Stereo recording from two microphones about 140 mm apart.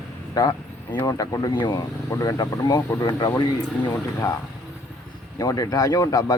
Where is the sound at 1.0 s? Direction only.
25° left (ahead or behind).